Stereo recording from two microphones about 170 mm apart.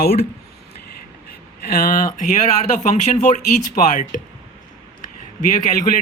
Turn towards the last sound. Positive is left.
turn(degrees=45)  # may be behind; listen again after turning